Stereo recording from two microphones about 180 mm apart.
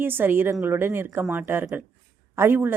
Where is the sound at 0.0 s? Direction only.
10° right (ahead or behind).